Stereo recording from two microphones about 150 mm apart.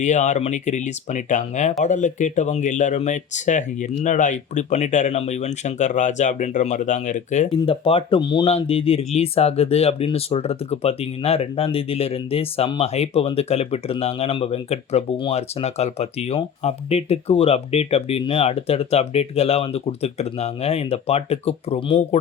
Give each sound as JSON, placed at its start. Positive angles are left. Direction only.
{"t": 0.0, "sound": "speech", "side_deg": 50}
{"t": 7.5, "sound": "speech", "side_deg": 40}